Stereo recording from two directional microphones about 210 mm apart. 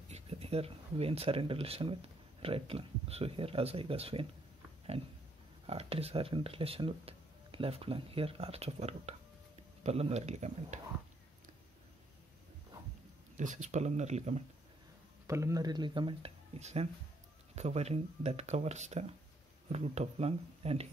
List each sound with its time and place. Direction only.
0.1 s speech: 30° right (ahead or behind)
5.7 s speech: 30° right (ahead or behind)
13.4 s speech: 35° right (ahead or behind)
15.2 s speech: 15° right (ahead or behind); by 20.9 s 30° right (ahead or behind)